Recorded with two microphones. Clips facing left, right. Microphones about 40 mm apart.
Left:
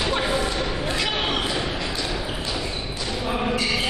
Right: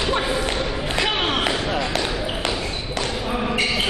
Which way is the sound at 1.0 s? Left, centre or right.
Right.